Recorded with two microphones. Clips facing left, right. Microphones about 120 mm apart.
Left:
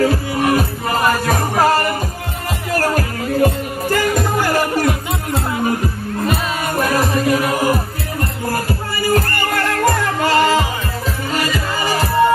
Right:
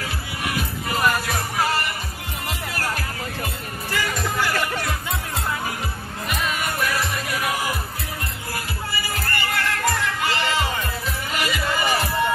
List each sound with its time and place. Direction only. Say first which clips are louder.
0.0 s music: left 14 dB; 45° left (ahead or behind)
6.2 s music: left 5 dB; 40° left (ahead or behind)